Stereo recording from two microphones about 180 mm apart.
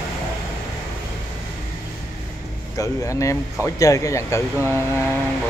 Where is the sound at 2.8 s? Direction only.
15° left (ahead or behind).